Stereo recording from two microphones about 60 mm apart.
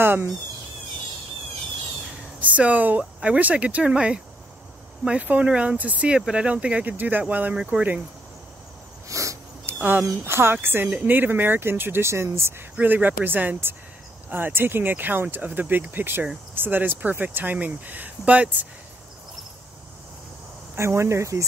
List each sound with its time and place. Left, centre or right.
0.0 s speech: right
2.4 s speech: right
3.0 s speech: centre
5.2 s speech: right
7.5 s speech: centre
9.1 s a sound: right
9.7 s a sound: right
10.2 s speech: right
12.8 s speech: right
20.7 s speech: right